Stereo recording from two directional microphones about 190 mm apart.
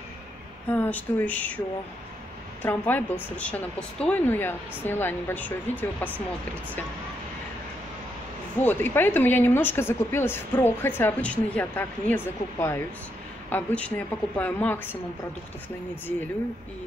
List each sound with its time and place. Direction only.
0.7 s speech: 10° left (ahead or behind)
2.6 s speech: 10° left (ahead or behind)
8.5 s speech: 10° left (ahead or behind)